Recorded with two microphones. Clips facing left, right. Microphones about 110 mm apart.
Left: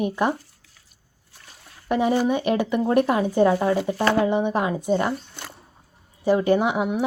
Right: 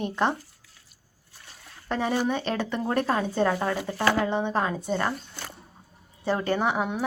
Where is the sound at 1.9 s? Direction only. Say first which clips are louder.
Left 5 dB; 15° left (ahead or behind).